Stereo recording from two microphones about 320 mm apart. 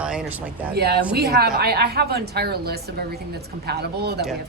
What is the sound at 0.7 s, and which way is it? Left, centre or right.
Speech, right.